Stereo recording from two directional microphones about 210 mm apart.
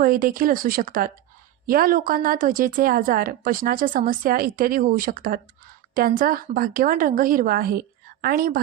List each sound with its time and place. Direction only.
0.0 s a woman's voice: 45° right (ahead or behind)